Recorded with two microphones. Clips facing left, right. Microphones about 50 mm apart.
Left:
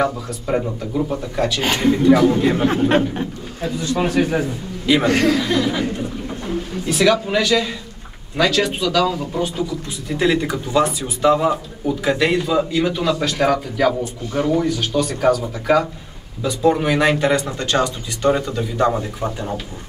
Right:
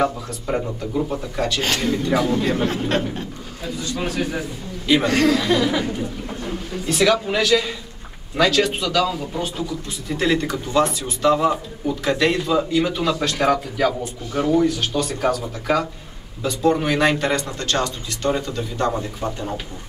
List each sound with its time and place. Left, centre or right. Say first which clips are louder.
0.0 s speech: left 1 dB; centre
1.7 s a man's voice: left 4 dB; centre
2.0 s a man's voice: left 7 dB; centre; by 5.4 s left
6.9 s speech: left 2 dB; centre